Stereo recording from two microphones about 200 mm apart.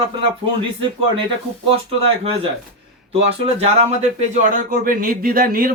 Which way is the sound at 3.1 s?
30° right (ahead or behind).